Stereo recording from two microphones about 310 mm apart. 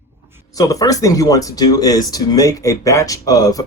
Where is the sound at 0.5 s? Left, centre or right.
Centre.